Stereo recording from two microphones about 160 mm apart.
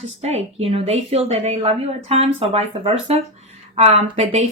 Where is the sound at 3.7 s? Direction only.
40° right (ahead or behind).